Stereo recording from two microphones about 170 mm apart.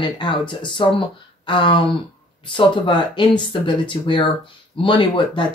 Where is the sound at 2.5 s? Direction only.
30° left (ahead or behind).